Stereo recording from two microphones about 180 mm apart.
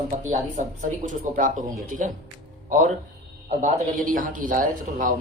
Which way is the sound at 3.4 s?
45° right (ahead or behind).